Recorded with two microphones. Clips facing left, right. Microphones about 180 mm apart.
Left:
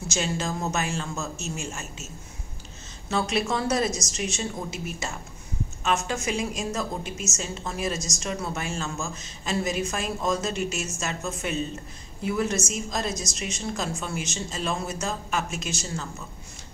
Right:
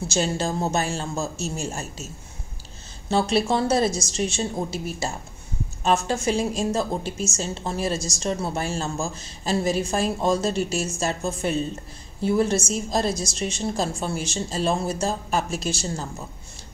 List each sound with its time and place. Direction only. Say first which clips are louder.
0.1 s a woman's voice: right 4 dB; 30° right (ahead or behind)
3.1 s a woman's voice: right 5 dB; 30° right (ahead or behind)